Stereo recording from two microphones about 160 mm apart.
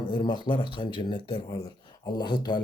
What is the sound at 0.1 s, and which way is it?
Speech, 30° left (ahead or behind).